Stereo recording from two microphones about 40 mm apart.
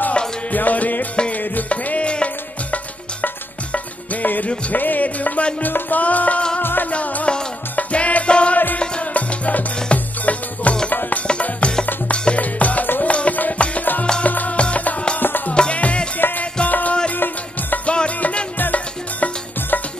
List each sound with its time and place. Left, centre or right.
0.5 s music: left
1.7 s music: left
6.6 s music: left
6.9 s music: left
14.6 s music: left
15.1 s music: left
15.5 s music: left
16.2 s music: left
16.6 s music: left
17.1 s music: left
17.8 s music: left
18.6 s music: left